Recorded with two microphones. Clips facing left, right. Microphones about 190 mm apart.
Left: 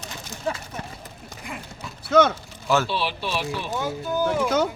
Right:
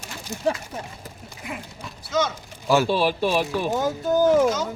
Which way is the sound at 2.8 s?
45° right (ahead or behind).